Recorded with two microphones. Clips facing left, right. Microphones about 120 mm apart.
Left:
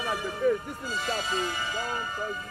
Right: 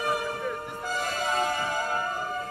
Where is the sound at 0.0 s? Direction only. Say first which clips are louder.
Left 2 dB; 55° right (ahead or behind).